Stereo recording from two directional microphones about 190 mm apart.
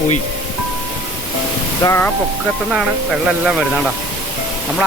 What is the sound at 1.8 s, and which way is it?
Speech, 15° left (ahead or behind).